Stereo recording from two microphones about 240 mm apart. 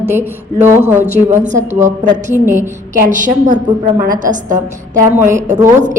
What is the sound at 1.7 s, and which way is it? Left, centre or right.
Speech, right.